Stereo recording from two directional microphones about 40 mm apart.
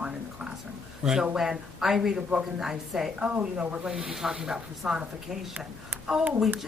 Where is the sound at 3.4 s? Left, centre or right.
Right.